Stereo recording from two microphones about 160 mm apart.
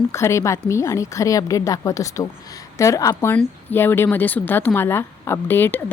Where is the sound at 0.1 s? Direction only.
15° left (ahead or behind).